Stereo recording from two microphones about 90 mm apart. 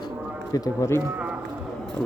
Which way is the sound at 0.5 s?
45° left (ahead or behind).